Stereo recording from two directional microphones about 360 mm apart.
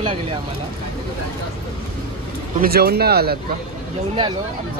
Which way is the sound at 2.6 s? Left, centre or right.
Right.